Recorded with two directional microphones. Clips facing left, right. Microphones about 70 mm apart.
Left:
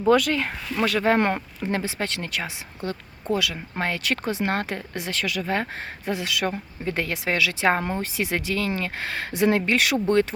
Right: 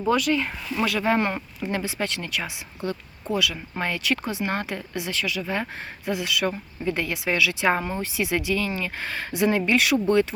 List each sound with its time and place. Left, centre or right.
0.1 s speech: left
0.8 s speech: left
1.6 s speech: left
6.1 s speech: left